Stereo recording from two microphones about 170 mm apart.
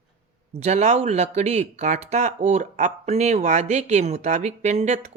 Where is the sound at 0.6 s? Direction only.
40° right (ahead or behind).